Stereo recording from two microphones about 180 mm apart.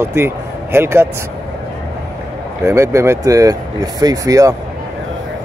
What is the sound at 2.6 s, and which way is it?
Speech, 15° right (ahead or behind).